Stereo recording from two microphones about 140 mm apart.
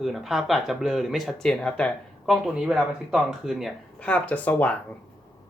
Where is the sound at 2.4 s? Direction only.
5° right (ahead or behind).